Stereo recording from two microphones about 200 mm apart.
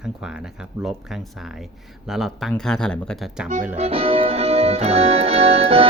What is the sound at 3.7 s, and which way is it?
Music, 30° right (ahead or behind).